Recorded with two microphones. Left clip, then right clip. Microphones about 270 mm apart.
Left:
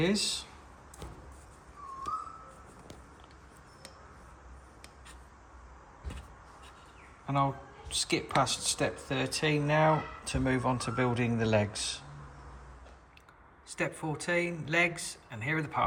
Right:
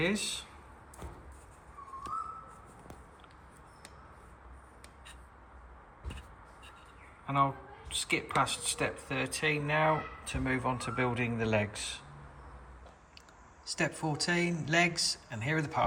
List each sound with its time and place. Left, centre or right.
0.0 s speech: centre
7.3 s speech: centre
13.7 s speech: centre